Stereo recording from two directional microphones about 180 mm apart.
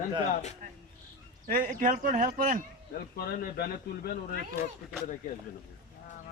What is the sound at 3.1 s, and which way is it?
Speech, 60° left (ahead or behind).